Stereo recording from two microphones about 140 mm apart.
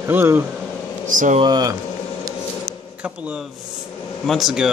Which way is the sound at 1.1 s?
65° right (ahead or behind).